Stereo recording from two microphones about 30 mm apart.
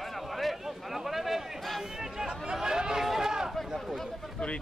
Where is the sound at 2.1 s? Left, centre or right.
Right.